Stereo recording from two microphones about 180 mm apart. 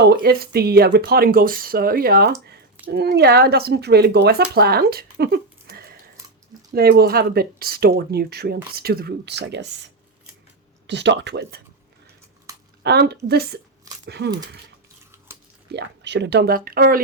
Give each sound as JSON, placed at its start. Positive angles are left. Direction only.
{"t": 0.0, "sound": "speech", "side_deg": -60}
{"t": 12.8, "sound": "speech", "side_deg": -65}
{"t": 15.3, "sound": "a sound", "side_deg": -15}
{"t": 15.7, "sound": "speech", "side_deg": -75}